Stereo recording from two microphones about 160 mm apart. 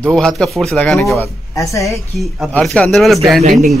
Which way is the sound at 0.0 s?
5° left (ahead or behind).